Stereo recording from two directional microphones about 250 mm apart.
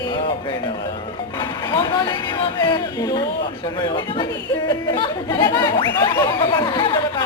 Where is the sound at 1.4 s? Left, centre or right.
Centre.